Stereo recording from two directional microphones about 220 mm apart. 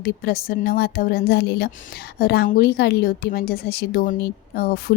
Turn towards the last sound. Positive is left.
turn(degrees=45)  # may be behind; listen again after turning